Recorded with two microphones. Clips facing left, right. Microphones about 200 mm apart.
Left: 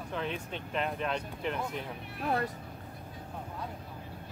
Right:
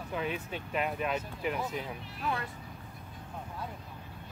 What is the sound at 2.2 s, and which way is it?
Speech, 55° left (ahead or behind).